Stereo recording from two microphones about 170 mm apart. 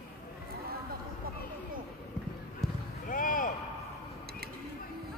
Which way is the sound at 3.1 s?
55° left (ahead or behind).